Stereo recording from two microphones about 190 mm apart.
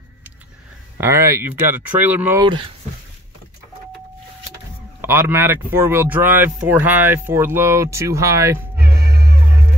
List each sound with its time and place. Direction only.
0.9 s speech: 15° right (ahead or behind)
5.0 s speech: 10° right (ahead or behind)